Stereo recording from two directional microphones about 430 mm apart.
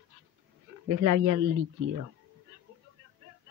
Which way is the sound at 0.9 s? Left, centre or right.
Right.